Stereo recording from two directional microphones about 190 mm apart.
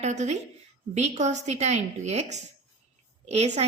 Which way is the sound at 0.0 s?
35° right (ahead or behind).